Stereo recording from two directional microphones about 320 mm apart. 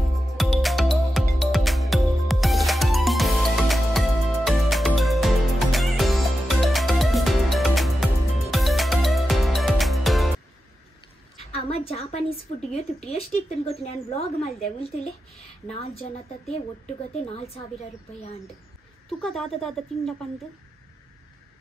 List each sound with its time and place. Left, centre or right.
0.1 s music: centre
11.3 s a woman's voice: centre
19.0 s a woman's voice: centre